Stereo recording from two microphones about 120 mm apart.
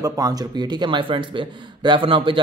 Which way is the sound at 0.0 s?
30° right (ahead or behind).